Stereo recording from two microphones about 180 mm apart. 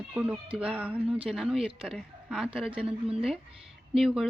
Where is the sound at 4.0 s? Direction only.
Centre (ahead or behind).